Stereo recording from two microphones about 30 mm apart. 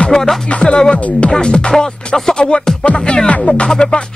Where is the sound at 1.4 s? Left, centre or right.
Left.